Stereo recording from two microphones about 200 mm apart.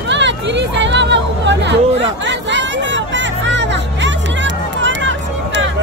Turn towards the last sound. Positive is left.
turn(degrees=-65)  # may be behind; listen again after turning